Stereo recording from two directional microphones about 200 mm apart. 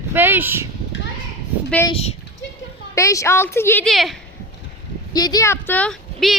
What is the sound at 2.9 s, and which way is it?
A woman's voice, 15° left (ahead or behind).